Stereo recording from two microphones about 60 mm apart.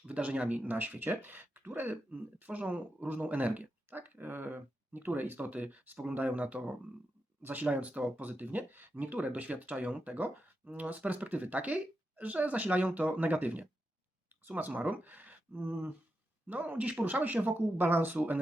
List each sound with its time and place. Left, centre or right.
0.0 s speech: right